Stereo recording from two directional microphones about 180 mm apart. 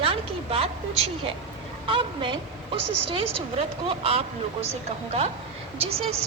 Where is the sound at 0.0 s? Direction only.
30° right (ahead or behind).